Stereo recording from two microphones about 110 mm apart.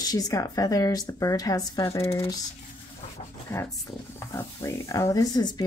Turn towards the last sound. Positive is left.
turn(degrees=30)  # may be behind; listen again after turning